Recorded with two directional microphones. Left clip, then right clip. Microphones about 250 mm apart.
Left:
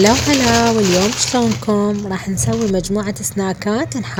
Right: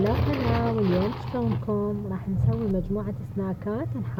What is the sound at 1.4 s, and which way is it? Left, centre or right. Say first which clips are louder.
Speech: left 9 dB; left.